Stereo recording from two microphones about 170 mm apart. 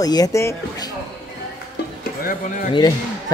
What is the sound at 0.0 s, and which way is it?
Speech, 20° left (ahead or behind).